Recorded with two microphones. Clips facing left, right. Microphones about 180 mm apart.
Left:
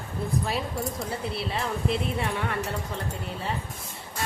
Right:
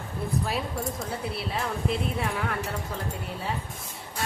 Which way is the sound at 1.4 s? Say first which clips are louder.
Left 1 dB; centre (ahead or behind).